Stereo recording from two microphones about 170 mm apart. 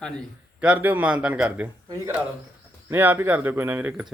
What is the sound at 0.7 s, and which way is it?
A man's voice, 10° right (ahead or behind).